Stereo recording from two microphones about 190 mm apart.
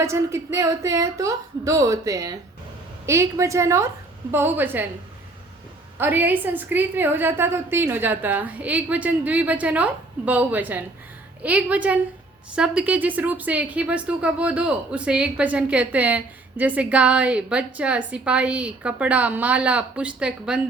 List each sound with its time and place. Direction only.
0.0 s a woman's voice: 15° right (ahead or behind)
6.0 s a woman's voice: 10° right (ahead or behind)